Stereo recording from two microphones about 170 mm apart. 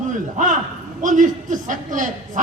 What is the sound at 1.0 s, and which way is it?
A man's voice, 50° right (ahead or behind).